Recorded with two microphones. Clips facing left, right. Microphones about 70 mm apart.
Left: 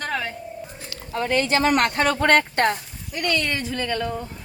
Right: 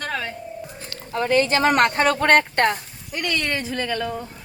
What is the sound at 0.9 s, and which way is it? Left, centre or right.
Speech, right.